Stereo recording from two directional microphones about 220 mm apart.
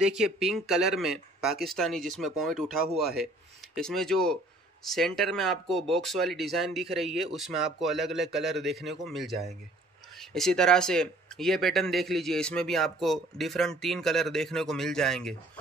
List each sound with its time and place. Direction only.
0.0 s speech: centre (ahead or behind)